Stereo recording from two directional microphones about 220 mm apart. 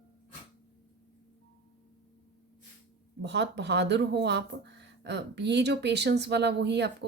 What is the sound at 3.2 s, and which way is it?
Speech, 50° right (ahead or behind).